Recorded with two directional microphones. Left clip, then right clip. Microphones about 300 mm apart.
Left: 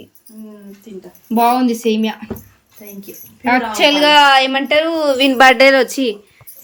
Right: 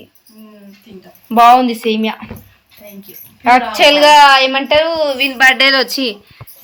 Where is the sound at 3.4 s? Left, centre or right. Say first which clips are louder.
Right 4 dB; centre.